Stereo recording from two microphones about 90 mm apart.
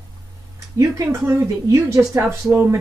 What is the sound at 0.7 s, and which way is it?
Speech, 30° right (ahead or behind).